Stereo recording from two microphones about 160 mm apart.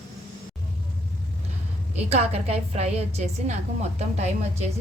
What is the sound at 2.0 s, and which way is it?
A woman's voice, 40° right (ahead or behind).